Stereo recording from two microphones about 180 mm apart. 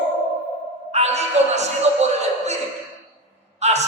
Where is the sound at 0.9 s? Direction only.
40° right (ahead or behind).